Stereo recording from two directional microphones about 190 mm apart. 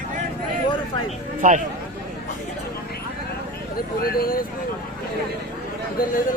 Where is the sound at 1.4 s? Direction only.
40° right (ahead or behind).